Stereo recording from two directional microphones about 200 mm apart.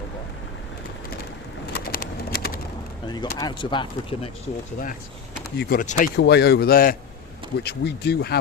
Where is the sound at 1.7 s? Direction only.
45° left (ahead or behind).